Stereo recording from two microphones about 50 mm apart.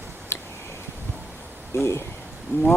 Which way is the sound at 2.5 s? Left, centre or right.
Right.